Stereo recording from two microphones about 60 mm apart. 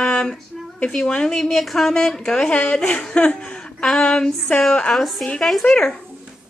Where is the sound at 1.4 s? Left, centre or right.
Centre.